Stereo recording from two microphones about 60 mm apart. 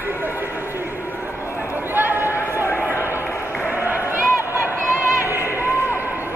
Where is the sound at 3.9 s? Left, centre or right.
Right.